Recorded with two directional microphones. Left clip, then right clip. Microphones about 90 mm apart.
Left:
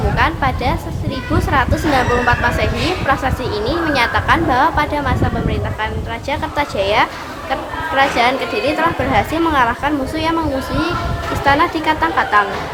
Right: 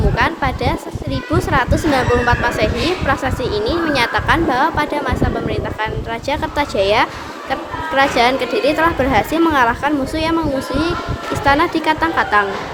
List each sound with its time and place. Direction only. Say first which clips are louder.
0.2 s a woman's voice: left 1 dB; 45° right (ahead or behind)
5.5 s speech: right 1 dB; 60° right (ahead or behind); by 9.4 s 85° right
9.5 s speech: right 1 dB; 55° right (ahead or behind)
11.4 s speech: even; 50° right (ahead or behind)